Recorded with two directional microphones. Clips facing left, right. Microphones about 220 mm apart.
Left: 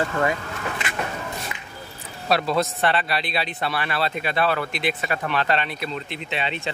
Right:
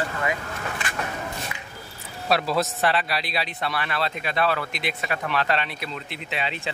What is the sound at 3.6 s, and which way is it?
Speech, 30° left (ahead or behind).